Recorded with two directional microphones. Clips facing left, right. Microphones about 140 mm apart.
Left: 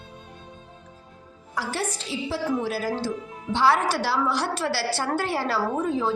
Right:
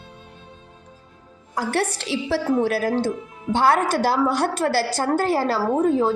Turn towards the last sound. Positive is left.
turn(degrees=-40)  # may be behind; listen again after turning